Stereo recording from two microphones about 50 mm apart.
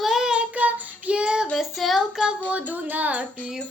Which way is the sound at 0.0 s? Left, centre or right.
Centre.